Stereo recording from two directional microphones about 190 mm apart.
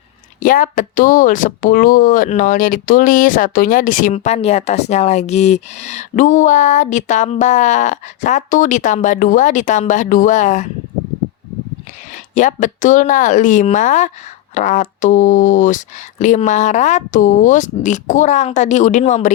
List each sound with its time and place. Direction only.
0.3 s speech: 45° left (ahead or behind)
12.3 s speech: 45° left (ahead or behind)